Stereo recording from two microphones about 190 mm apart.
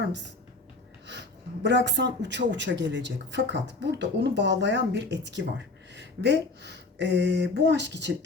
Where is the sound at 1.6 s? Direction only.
65° right (ahead or behind).